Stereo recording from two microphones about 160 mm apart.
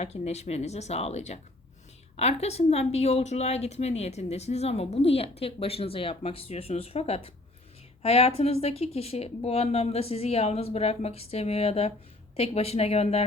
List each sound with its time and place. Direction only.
0.0 s a woman's voice: 40° left (ahead or behind)